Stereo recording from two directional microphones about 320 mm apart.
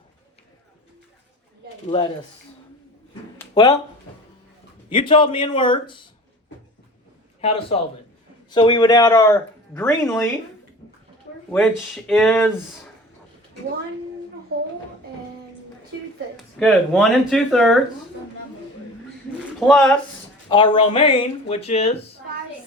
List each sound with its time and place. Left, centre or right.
3.5 s speech: centre
4.9 s speech: centre
7.4 s speech: centre
11.5 s speech: centre
16.6 s speech: centre
19.5 s speech: centre
20.5 s speech: centre